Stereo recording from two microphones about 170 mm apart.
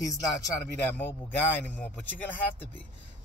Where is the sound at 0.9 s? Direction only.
10° left (ahead or behind).